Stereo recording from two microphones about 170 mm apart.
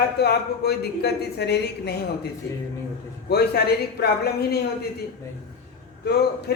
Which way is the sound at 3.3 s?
70° left (ahead or behind).